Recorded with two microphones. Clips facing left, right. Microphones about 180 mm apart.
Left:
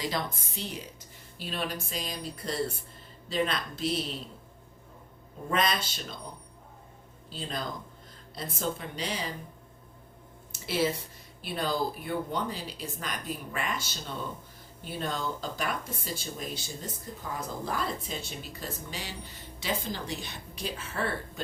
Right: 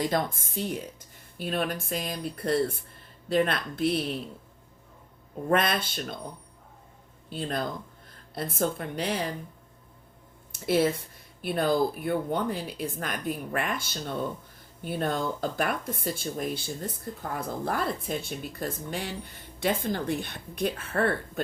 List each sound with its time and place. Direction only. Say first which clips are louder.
0.0 s speech: right 5 dB; 50° right (ahead or behind)
5.5 s speech: right 4 dB; 55° right (ahead or behind)
7.3 s speech: right 5 dB; 55° right (ahead or behind)
10.5 s speech: right 5 dB; 55° right (ahead or behind)